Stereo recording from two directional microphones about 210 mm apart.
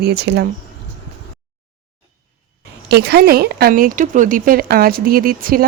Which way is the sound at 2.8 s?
50° right (ahead or behind).